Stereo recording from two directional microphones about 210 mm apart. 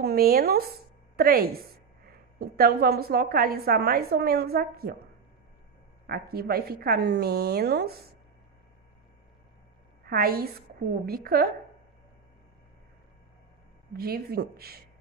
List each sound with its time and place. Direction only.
0.0 s a woman's voice: 45° right (ahead or behind)
6.0 s a woman's voice: 45° right (ahead or behind)
10.0 s a woman's voice: 45° right (ahead or behind)
13.9 s a woman's voice: 45° right (ahead or behind)